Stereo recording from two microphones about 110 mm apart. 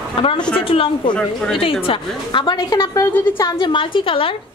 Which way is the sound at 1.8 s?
50° left (ahead or behind).